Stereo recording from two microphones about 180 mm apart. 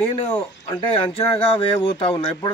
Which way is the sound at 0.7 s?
30° left (ahead or behind).